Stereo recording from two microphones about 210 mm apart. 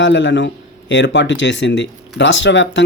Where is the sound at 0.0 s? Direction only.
60° left (ahead or behind).